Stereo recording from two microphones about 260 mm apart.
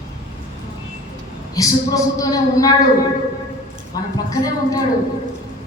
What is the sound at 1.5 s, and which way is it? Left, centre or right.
A man's voice, centre.